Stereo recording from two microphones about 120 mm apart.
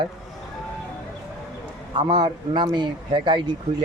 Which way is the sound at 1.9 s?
35° right (ahead or behind).